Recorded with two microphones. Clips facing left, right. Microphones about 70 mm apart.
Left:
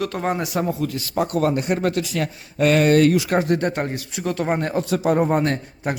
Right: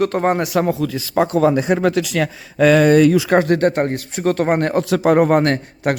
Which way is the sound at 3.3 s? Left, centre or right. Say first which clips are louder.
Right 5 dB; right.